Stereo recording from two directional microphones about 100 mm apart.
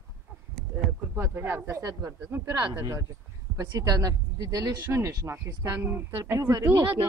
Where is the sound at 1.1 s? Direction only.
20° right (ahead or behind).